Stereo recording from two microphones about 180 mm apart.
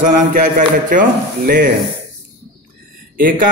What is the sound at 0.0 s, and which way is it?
A man's voice, 50° right (ahead or behind).